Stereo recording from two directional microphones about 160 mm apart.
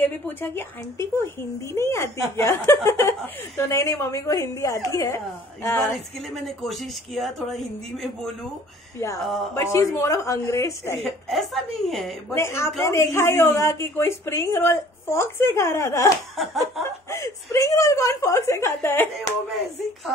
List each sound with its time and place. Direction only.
0.0 s a woman's voice: 15° left (ahead or behind)
6.3 s a woman's voice: centre (ahead or behind)
9.6 s a woman's voice: 15° left (ahead or behind)
11.0 s a woman's voice: centre (ahead or behind)
12.4 s a woman's voice: 15° left (ahead or behind)
16.3 s a woman's voice: centre (ahead or behind)
17.1 s a woman's voice: 15° left (ahead or behind)